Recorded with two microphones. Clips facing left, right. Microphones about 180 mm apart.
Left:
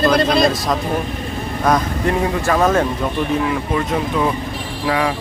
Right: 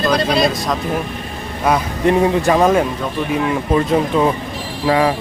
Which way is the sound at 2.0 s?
20° right (ahead or behind).